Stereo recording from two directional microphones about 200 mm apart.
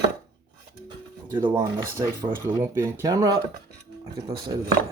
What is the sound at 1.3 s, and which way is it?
Speech, 10° right (ahead or behind).